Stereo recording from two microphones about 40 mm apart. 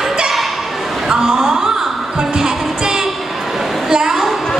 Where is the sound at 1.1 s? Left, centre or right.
Centre.